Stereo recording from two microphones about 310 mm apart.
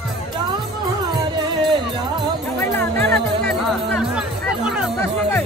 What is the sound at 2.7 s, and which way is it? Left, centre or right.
Speech, centre.